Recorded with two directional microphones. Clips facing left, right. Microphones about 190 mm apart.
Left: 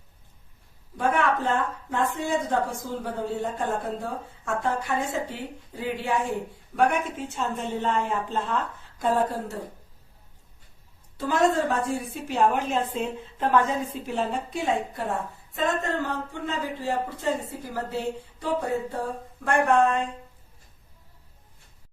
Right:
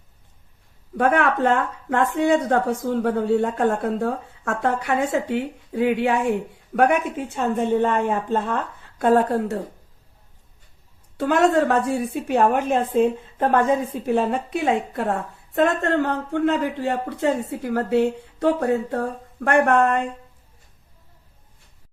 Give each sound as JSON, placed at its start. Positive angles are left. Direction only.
{"t": 0.9, "sound": "a woman's voice", "side_deg": -65}
{"t": 11.2, "sound": "a woman's voice", "side_deg": -70}